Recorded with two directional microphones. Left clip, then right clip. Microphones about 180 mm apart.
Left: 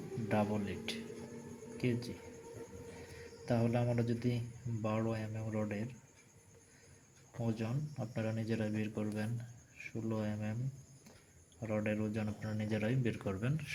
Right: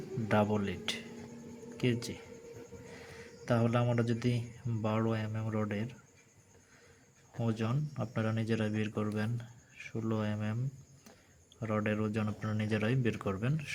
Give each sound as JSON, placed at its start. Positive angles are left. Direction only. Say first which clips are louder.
{"t": 0.3, "sound": "speech", "louder": "right 5 dB", "side_deg": -35}
{"t": 3.4, "sound": "speech", "louder": "right 4 dB", "side_deg": -30}
{"t": 7.4, "sound": "speech", "louder": "right 4 dB", "side_deg": -35}
{"t": 11.6, "sound": "speech", "louder": "right 3 dB", "side_deg": -30}